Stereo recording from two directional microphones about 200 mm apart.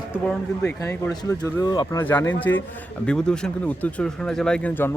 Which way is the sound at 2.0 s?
10° left (ahead or behind).